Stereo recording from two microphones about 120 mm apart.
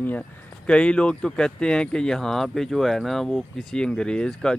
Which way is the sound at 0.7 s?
10° left (ahead or behind).